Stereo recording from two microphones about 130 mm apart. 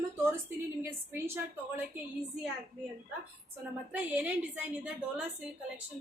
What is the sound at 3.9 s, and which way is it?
A woman's voice, 10° right (ahead or behind).